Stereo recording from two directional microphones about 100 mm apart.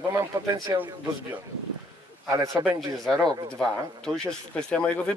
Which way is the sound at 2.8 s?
5° left (ahead or behind).